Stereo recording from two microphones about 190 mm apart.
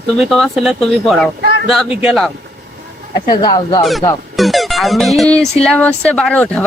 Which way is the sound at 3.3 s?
25° left (ahead or behind).